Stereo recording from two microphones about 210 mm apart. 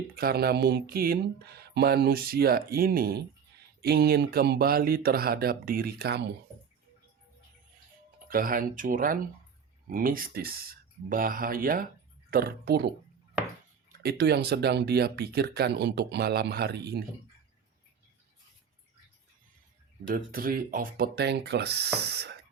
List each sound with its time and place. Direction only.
0.2 s speech: 45° right (ahead or behind)
8.3 s speech: 40° right (ahead or behind)
14.0 s speech: 50° right (ahead or behind)
20.1 s speech: 45° right (ahead or behind)